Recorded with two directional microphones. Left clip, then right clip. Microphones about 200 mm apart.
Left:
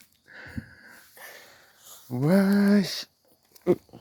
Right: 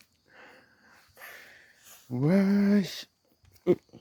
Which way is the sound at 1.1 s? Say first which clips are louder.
Right 1 dB; 10° right (ahead or behind).